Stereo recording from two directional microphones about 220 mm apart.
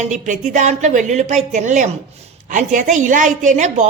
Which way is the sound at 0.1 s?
35° right (ahead or behind).